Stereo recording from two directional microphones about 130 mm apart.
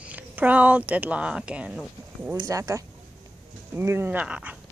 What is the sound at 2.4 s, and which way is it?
Speech, 25° right (ahead or behind).